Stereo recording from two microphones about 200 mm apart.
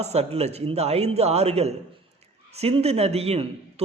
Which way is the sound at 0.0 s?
30° right (ahead or behind).